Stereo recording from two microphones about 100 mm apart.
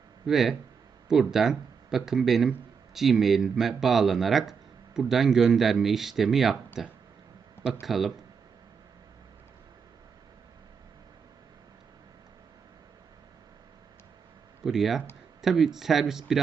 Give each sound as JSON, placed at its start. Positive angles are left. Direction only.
{"t": 0.3, "sound": "speech", "side_deg": -5}
{"t": 7.6, "sound": "speech", "side_deg": -5}
{"t": 14.6, "sound": "speech", "side_deg": -5}